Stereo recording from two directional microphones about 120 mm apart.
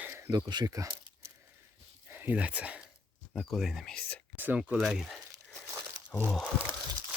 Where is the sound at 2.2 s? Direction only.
10° right (ahead or behind).